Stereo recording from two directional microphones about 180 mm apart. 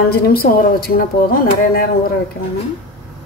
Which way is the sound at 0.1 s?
55° left (ahead or behind).